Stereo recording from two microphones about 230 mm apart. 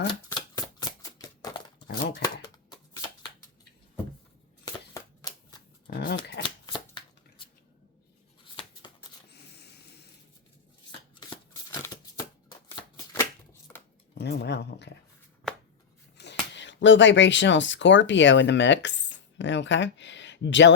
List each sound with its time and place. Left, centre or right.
0.1 s shuffling cards: centre
1.9 s speech: left
4.6 s shuffling cards: centre
5.9 s shuffling cards: left
6.4 s shuffling cards: centre
11.1 s shuffling cards: centre
14.2 s a sound: left
16.1 s speech: left